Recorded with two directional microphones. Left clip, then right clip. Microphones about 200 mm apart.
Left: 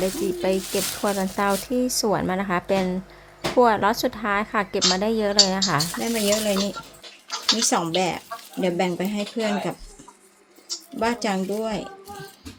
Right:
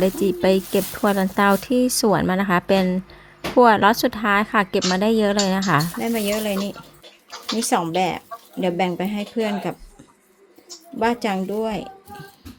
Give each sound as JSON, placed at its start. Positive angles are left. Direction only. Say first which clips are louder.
{"t": 0.0, "sound": "speech", "louder": "right 5 dB", "side_deg": -25}
{"t": 6.0, "sound": "speech", "louder": "even", "side_deg": -5}
{"t": 11.0, "sound": "speech", "louder": "right 3 dB", "side_deg": -10}